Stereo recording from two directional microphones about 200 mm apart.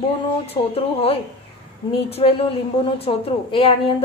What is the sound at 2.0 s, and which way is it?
A woman's voice, 30° left (ahead or behind).